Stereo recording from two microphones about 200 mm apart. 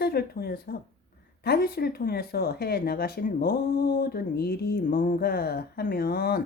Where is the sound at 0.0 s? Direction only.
50° left (ahead or behind).